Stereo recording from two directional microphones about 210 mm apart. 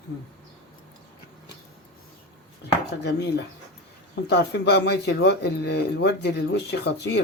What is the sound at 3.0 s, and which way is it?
Speech, 50° left (ahead or behind).